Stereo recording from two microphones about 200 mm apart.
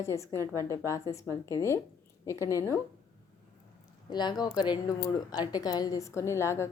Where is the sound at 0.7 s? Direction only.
15° left (ahead or behind).